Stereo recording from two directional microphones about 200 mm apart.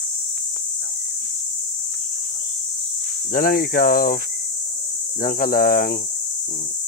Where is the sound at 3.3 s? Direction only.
45° left (ahead or behind).